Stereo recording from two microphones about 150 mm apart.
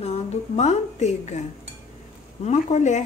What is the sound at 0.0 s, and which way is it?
A woman's voice, 45° left (ahead or behind).